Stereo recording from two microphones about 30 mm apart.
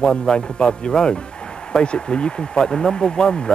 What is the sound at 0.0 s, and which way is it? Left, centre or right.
Speech, left.